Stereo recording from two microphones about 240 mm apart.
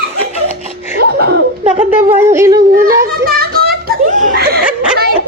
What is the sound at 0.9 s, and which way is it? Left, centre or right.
Laughter, right.